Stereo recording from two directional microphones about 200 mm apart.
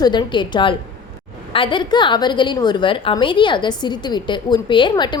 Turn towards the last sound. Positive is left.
turn(degrees=20)  # may be behind; listen again after turning